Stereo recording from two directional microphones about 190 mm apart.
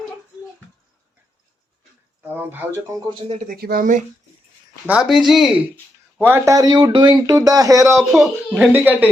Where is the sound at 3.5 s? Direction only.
50° right (ahead or behind).